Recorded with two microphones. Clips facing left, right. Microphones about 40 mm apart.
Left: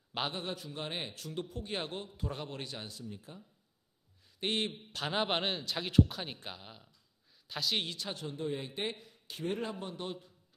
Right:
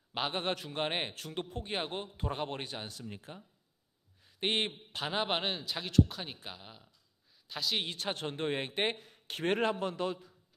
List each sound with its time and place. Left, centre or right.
0.3 s a man's voice: right
2.9 s a man's voice: right
4.4 s a man's voice: right
5.0 s a man's voice: centre
7.9 s a man's voice: right